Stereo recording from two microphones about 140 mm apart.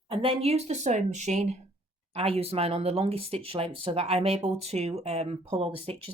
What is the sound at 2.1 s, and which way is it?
Speech, 45° right (ahead or behind).